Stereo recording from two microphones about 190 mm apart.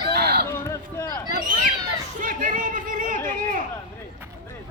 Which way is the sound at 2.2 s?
45° right (ahead or behind).